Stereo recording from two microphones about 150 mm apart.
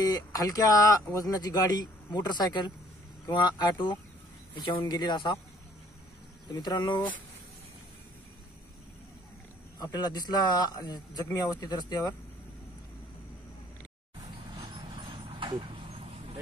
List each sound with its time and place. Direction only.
0.0 s speech: 25° left (ahead or behind)
6.5 s speech: 30° left (ahead or behind)
9.8 s speech: 25° left (ahead or behind)
14.5 s vehicle: 35° right (ahead or behind)